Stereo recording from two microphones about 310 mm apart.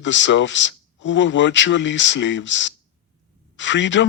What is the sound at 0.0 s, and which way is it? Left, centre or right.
Speech, left.